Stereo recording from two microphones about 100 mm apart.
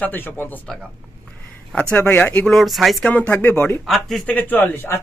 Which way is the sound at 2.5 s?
Centre (ahead or behind).